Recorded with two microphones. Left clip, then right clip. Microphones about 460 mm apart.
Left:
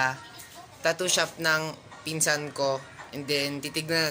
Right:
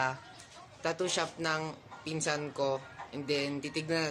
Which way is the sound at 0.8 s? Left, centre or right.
Right.